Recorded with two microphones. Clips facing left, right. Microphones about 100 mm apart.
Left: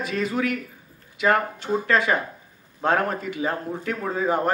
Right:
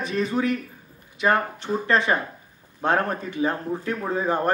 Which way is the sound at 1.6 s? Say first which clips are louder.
Even; 25° right (ahead or behind).